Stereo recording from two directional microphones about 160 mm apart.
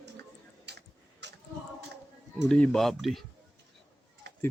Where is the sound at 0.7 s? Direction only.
90° right.